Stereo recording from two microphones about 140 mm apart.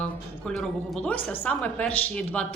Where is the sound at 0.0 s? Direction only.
5° left (ahead or behind).